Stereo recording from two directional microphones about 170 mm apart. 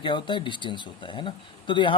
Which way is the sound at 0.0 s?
30° left (ahead or behind).